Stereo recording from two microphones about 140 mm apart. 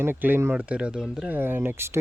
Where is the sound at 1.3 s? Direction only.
15° right (ahead or behind).